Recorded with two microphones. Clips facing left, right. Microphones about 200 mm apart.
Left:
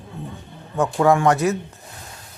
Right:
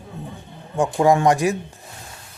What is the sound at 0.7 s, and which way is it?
Speech, 15° right (ahead or behind).